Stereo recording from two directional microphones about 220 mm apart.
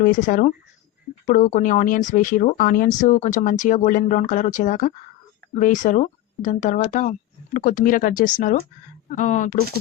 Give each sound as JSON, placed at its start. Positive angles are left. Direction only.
{"t": 0.0, "sound": "speech", "side_deg": 40}